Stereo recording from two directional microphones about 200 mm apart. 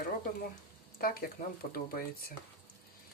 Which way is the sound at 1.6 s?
50° left (ahead or behind).